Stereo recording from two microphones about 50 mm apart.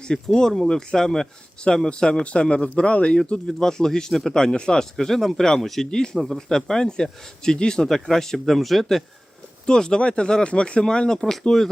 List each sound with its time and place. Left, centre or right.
0.0 s speech: centre
4.4 s speech: centre
9.6 s speech: centre